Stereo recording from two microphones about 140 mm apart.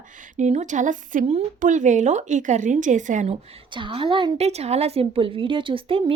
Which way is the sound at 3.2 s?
40° right (ahead or behind).